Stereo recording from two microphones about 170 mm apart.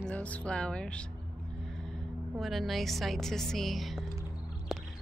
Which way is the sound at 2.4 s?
Centre (ahead or behind).